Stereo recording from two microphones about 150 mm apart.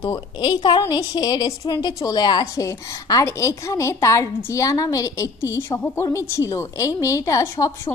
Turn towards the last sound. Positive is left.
turn(degrees=20)  # may be behind; listen again after turning